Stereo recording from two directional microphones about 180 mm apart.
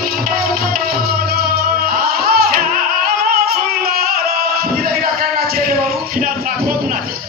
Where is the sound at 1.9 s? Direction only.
55° right (ahead or behind).